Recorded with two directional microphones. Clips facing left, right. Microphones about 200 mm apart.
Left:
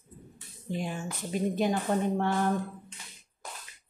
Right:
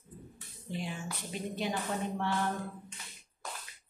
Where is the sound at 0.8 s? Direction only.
45° left (ahead or behind).